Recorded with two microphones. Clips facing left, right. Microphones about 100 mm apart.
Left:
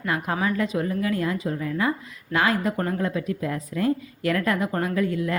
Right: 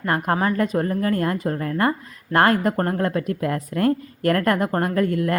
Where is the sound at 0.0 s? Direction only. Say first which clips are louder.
Right 4 dB; 45° right (ahead or behind).